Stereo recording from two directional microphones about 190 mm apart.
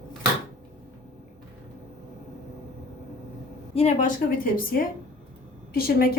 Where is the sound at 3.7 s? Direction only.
35° left (ahead or behind).